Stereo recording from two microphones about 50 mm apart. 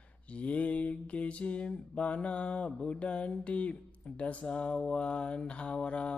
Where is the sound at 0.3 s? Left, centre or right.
Left.